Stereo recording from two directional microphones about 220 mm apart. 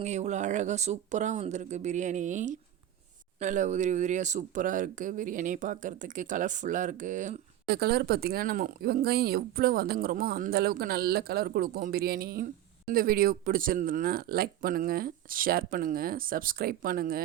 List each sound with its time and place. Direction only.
0.0 s speech: 30° right (ahead or behind)